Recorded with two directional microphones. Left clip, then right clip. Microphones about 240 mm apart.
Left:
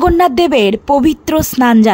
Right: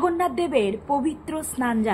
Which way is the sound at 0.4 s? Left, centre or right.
Left.